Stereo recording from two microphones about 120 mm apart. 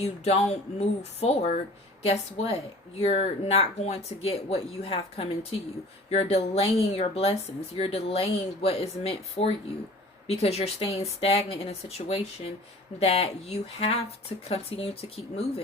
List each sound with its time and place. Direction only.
0.0 s speech: 65° left (ahead or behind)